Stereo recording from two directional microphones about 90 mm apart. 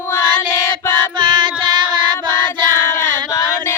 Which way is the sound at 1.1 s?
60° right (ahead or behind).